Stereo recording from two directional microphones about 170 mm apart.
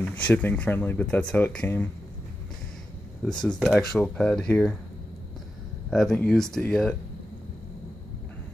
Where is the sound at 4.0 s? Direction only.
5° left (ahead or behind).